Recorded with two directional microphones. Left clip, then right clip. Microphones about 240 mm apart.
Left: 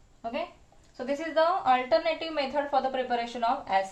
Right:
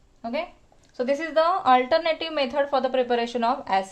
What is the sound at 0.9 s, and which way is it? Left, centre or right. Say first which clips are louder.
A woman's voice: right 4 dB; right.